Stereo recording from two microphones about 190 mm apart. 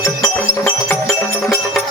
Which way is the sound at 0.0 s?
15° left (ahead or behind).